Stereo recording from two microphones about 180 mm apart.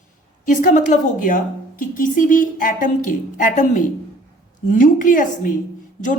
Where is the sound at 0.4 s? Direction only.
45° left (ahead or behind).